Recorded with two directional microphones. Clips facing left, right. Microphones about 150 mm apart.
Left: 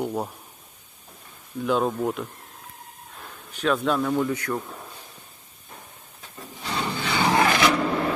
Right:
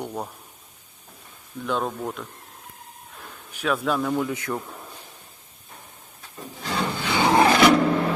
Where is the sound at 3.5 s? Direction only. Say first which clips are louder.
Left 1 dB; 5° right (ahead or behind).